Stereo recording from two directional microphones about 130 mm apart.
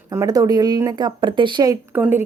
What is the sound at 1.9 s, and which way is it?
Speech, 20° right (ahead or behind).